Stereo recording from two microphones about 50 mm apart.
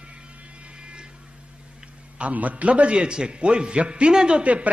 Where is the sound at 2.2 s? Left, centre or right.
Right.